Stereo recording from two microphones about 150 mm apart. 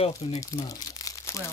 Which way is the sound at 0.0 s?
45° left (ahead or behind).